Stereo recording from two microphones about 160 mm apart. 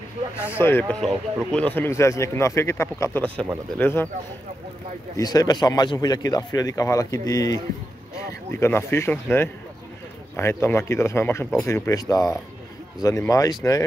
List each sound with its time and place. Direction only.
0.4 s speech: 15° left (ahead or behind)
5.1 s speech: 25° left (ahead or behind)